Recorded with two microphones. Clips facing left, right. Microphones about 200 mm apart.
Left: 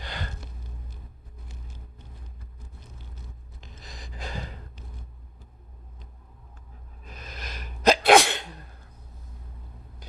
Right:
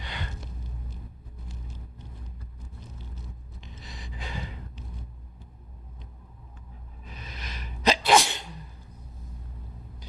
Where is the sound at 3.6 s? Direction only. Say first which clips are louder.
Even; 40° left (ahead or behind).